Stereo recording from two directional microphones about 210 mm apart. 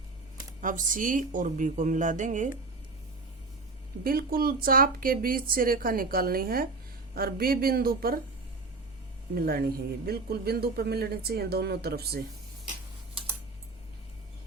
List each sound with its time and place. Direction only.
0.6 s a woman's voice: 40° right (ahead or behind)
4.0 s speech: 45° right (ahead or behind)
9.3 s speech: 45° right (ahead or behind)